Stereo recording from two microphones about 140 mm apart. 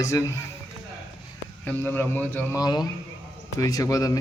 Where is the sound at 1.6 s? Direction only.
10° left (ahead or behind).